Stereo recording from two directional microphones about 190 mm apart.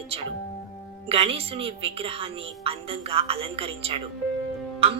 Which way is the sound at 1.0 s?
30° right (ahead or behind).